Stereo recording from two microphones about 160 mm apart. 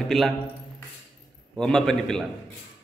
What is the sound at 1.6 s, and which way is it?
Speech, 5° left (ahead or behind).